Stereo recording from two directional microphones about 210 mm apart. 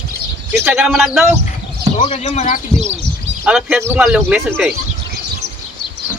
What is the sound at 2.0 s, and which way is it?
Speech, 30° left (ahead or behind).